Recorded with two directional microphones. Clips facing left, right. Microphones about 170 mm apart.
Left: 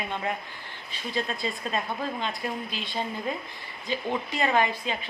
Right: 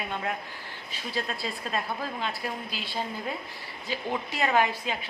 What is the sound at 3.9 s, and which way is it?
A woman's voice, 5° right (ahead or behind).